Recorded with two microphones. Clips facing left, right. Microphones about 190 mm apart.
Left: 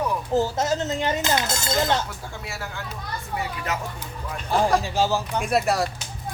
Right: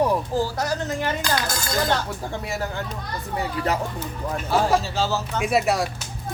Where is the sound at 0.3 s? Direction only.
20° left (ahead or behind).